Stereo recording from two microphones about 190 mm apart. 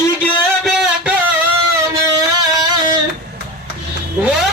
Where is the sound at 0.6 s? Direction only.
5° right (ahead or behind).